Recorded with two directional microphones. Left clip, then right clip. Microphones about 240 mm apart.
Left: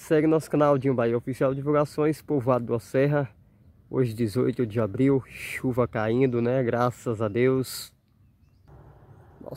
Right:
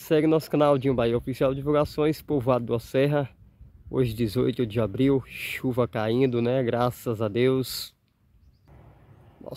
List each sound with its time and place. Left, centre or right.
0.0 s speech: centre